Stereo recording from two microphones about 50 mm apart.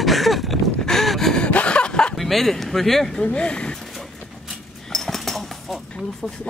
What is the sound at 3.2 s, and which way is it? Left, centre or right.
Speech, left.